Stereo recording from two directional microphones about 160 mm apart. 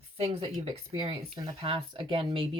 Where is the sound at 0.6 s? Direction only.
35° right (ahead or behind).